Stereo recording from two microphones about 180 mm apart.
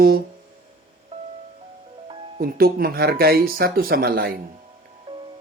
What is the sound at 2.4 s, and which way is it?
Speech, 55° right (ahead or behind).